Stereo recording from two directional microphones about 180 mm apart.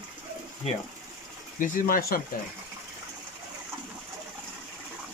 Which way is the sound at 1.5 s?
50° left (ahead or behind).